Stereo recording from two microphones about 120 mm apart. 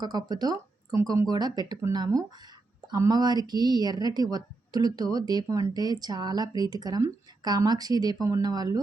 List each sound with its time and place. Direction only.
0.0 s speech: 35° right (ahead or behind)
2.8 s speech: 30° right (ahead or behind)